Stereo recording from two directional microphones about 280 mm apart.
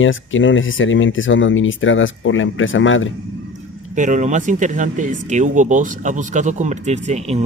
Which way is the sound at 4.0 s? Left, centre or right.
Right.